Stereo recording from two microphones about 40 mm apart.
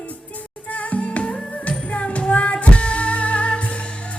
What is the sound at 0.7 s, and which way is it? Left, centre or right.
Music, left.